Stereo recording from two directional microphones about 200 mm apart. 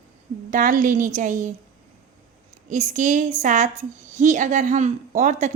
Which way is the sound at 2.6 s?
40° right (ahead or behind).